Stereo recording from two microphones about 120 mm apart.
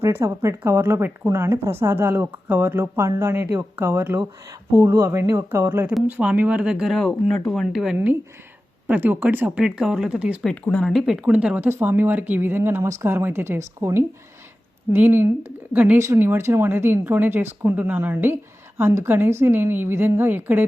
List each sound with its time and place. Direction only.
0.0 s speech: 20° right (ahead or behind); by 7.9 s centre (ahead or behind)
7.9 s speech: 15° right (ahead or behind)
10.4 s speech: 10° left (ahead or behind); by 20.7 s 15° right (ahead or behind)